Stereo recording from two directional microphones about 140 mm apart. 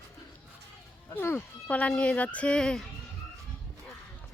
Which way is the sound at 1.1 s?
15° left (ahead or behind).